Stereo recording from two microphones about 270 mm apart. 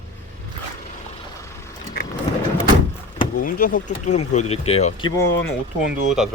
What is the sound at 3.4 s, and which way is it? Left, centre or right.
Speech, left.